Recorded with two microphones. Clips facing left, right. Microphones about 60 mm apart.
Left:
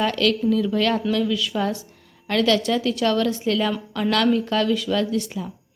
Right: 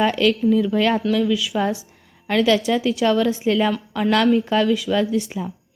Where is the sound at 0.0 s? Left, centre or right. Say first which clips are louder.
Right 3 dB; centre.